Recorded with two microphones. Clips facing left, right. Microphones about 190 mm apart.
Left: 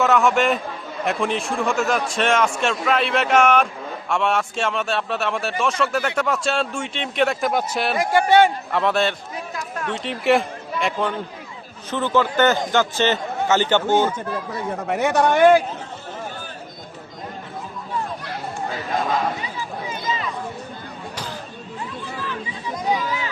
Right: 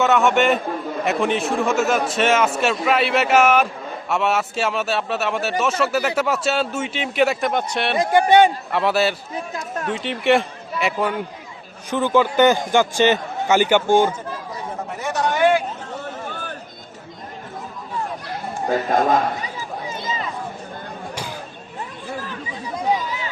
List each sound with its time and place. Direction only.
0.0 s a man's voice: centre (ahead or behind)
7.9 s speech: 20° right (ahead or behind)
8.7 s a man's voice: 5° right (ahead or behind)
14.8 s a man's voice: 70° left (ahead or behind); by 15.6 s 45° left (ahead or behind)
18.7 s a man's voice: 50° right (ahead or behind)